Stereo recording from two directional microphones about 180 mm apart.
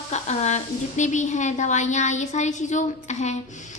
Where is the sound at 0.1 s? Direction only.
40° left (ahead or behind).